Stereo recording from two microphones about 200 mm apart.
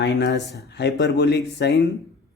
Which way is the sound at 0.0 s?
60° left (ahead or behind).